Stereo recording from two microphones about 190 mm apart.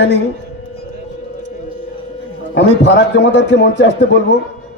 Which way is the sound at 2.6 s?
65° left (ahead or behind).